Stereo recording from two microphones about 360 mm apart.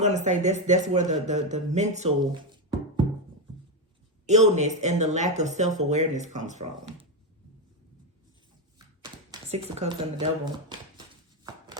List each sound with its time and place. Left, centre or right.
0.0 s speech: centre
4.3 s speech: centre
9.0 s speech: centre
11.4 s a sound: centre